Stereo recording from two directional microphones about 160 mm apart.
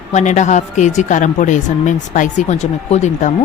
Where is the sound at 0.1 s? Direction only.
50° left (ahead or behind).